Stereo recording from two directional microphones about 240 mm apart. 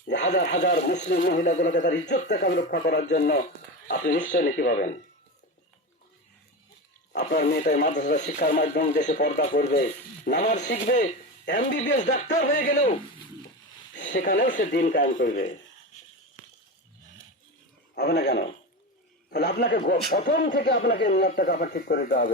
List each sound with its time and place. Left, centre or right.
0.6 s speech: left
7.3 s speech: left
13.9 s speech: left
17.9 s a man's voice: left